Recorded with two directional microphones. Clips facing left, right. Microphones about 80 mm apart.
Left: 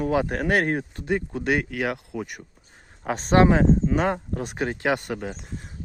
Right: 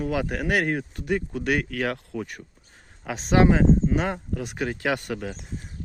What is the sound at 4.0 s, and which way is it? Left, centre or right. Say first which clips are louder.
Speech: left 3 dB; left.